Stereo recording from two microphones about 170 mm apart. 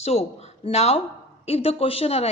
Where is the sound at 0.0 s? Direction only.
40° left (ahead or behind).